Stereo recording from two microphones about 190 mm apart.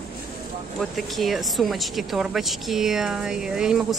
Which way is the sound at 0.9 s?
Centre (ahead or behind).